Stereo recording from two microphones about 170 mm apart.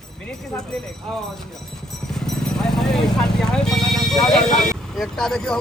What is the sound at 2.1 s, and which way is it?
Horse, 5° left (ahead or behind).